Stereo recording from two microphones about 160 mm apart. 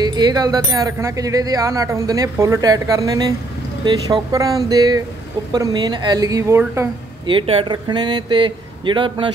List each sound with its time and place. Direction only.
0.0 s speech: 25° right (ahead or behind)
7.2 s speech: 35° right (ahead or behind)